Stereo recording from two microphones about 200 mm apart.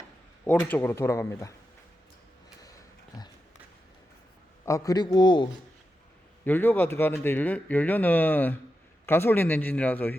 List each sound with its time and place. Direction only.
0.4 s a man's voice: 10° left (ahead or behind)
4.6 s a man's voice: 15° left (ahead or behind)
6.4 s a man's voice: 10° left (ahead or behind)